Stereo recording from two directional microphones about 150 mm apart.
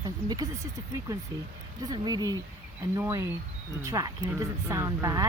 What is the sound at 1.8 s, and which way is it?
Speech, 25° right (ahead or behind).